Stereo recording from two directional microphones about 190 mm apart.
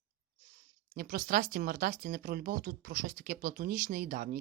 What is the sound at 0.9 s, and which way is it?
Speech, 45° right (ahead or behind).